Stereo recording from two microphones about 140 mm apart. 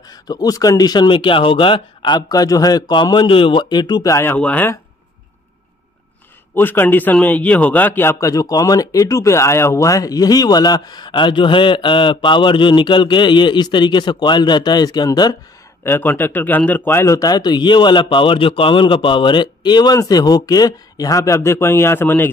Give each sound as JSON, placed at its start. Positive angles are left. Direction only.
{"t": 0.1, "sound": "a man's voice", "side_deg": 25}
{"t": 6.5, "sound": "a man's voice", "side_deg": 15}
{"t": 15.8, "sound": "a man's voice", "side_deg": 15}